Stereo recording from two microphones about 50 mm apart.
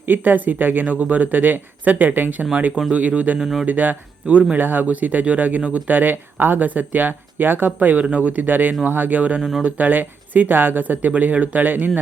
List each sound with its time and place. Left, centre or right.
0.0 s speech: right
3.3 s speech: centre
3.7 s speech: right
9.4 s speech: centre
9.6 s speech: right